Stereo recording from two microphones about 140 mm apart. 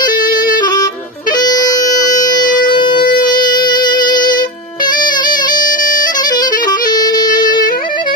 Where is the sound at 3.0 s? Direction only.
90° left.